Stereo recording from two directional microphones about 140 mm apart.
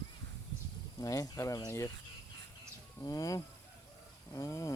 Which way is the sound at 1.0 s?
25° left (ahead or behind).